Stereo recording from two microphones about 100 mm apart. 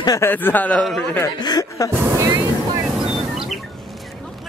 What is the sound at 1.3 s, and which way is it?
Speech, 45° left (ahead or behind).